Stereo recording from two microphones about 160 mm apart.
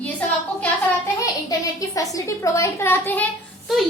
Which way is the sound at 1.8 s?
20° left (ahead or behind).